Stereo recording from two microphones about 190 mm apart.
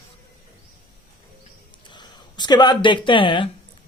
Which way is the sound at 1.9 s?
25° left (ahead or behind).